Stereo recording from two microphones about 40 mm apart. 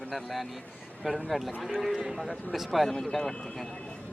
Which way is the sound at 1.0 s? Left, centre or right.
Centre.